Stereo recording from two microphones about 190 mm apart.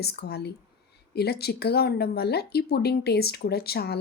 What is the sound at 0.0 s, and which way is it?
Speech, 60° left (ahead or behind).